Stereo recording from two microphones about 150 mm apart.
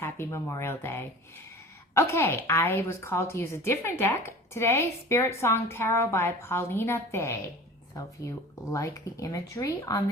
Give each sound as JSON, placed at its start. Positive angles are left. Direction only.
{"t": 0.0, "sound": "speech", "side_deg": 20}
{"t": 8.7, "sound": "speech", "side_deg": 20}